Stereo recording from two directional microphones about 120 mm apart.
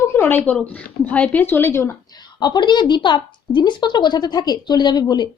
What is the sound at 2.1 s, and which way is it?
A woman's voice, 35° left (ahead or behind).